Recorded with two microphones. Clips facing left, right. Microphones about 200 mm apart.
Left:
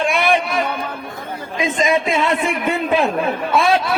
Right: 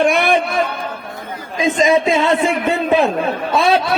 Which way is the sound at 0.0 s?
45° right (ahead or behind).